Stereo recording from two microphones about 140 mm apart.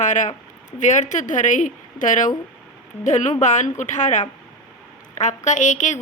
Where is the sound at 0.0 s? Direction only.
60° left (ahead or behind).